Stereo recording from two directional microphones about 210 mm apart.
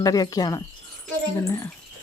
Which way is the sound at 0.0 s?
15° left (ahead or behind).